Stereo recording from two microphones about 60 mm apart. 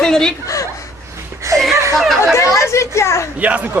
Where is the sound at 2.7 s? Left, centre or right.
Left.